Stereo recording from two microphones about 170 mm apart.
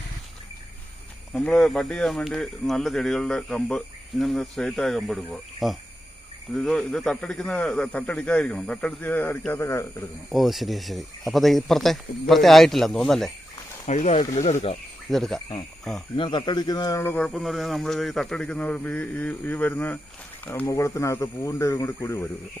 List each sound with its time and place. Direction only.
1.3 s speech: 5° left (ahead or behind)
10.3 s speech: centre (ahead or behind)
13.8 s speech: 40° left (ahead or behind)
15.1 s speech: centre (ahead or behind)
16.1 s speech: 30° left (ahead or behind)